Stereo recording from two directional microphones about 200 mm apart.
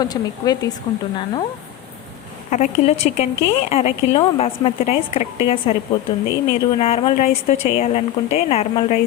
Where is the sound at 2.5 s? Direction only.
35° left (ahead or behind).